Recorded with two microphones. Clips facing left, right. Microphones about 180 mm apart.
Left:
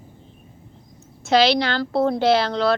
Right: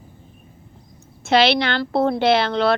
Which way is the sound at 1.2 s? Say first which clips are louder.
Even; 60° right (ahead or behind).